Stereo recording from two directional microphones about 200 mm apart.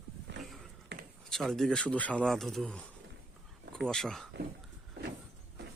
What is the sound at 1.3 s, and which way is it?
Speech, centre (ahead or behind).